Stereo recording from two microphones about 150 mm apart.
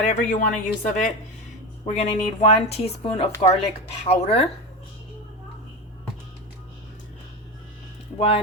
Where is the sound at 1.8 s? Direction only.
45° left (ahead or behind).